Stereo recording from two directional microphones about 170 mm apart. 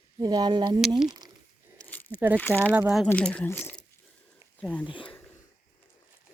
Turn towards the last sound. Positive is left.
turn(degrees=30)  # may be behind; listen again after turning